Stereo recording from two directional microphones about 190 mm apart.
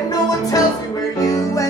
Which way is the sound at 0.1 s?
20° left (ahead or behind).